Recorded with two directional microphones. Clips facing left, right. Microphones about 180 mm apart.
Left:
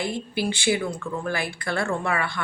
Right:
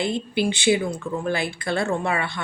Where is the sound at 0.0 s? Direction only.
20° right (ahead or behind).